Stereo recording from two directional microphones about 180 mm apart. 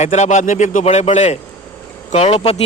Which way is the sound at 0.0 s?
40° left (ahead or behind).